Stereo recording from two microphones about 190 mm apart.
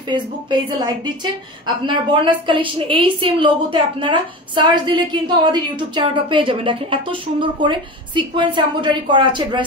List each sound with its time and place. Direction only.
0.1 s a woman's voice: 25° right (ahead or behind)